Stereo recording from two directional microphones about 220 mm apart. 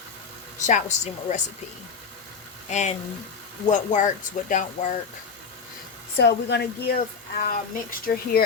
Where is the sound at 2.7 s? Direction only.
30° left (ahead or behind).